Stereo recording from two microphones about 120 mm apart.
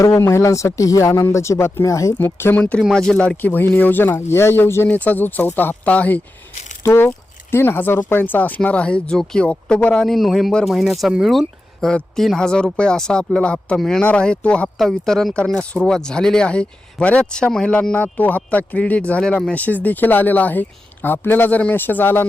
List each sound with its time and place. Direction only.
0.2 s speech: 25° left (ahead or behind)